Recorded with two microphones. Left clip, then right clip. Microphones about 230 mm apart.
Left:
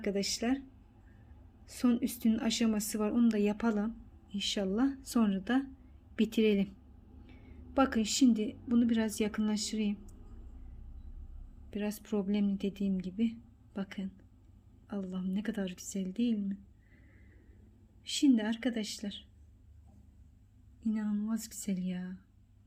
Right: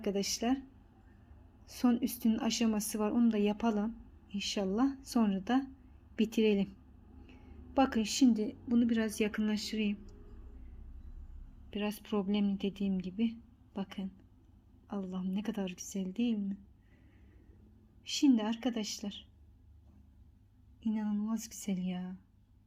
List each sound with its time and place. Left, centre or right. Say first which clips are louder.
0.0 s speech: even; centre
1.6 s a woman's voice: even; centre
11.7 s a woman's voice: even; centre
18.2 s a woman's voice: left 1 dB; centre
20.8 s speech: left 1 dB; centre